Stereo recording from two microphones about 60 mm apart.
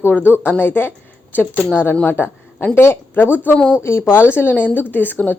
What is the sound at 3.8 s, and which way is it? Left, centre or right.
Speech, left.